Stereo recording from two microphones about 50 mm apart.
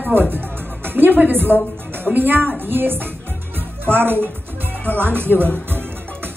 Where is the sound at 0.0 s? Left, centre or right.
Right.